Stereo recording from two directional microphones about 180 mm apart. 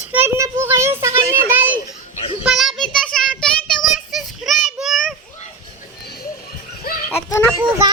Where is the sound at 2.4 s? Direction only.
Centre (ahead or behind).